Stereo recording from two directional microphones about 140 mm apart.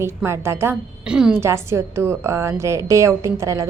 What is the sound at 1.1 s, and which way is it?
Speech, 5° right (ahead or behind).